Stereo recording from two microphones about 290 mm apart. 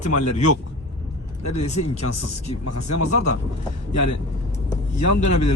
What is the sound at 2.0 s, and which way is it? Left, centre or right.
Speech, left.